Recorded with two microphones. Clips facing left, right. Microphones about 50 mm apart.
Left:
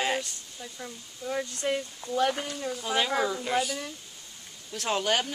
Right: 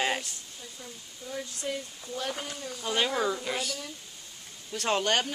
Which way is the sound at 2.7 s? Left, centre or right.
Centre.